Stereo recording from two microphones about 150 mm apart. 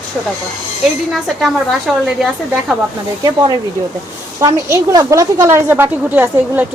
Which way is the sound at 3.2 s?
30° right (ahead or behind).